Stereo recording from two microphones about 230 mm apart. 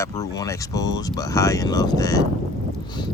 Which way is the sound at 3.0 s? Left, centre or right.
Centre.